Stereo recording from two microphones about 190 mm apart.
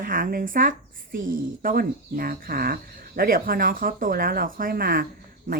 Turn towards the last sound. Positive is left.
turn(degrees=-50)  # may be behind; listen again after turning